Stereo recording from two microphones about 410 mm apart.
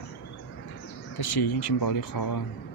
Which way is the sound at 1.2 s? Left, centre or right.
Left.